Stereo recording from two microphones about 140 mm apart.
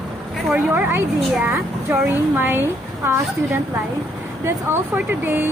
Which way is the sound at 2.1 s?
15° right (ahead or behind).